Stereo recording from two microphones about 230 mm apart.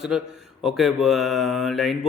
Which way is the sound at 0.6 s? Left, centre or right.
Centre.